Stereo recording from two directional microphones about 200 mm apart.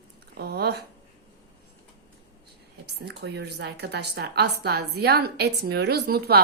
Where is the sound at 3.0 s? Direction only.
55° right (ahead or behind).